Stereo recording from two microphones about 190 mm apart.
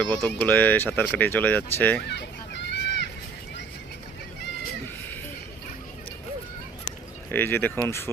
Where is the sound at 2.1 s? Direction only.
65° left (ahead or behind).